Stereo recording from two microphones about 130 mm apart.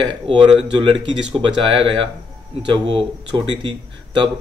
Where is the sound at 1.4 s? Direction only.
40° right (ahead or behind).